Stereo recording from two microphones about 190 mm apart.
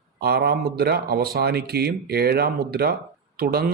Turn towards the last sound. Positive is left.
turn(degrees=-55)  # may be behind; listen again after turning